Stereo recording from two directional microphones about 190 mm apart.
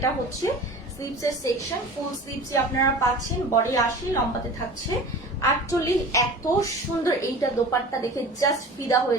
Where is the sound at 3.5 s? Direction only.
20° left (ahead or behind).